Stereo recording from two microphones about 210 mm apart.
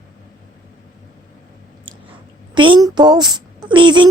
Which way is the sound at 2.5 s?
25° right (ahead or behind).